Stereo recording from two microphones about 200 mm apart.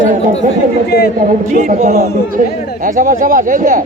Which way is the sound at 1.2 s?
40° right (ahead or behind).